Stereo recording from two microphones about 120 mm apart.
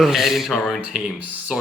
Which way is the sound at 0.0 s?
Centre (ahead or behind).